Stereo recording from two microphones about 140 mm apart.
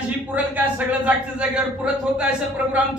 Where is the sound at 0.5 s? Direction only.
10° right (ahead or behind).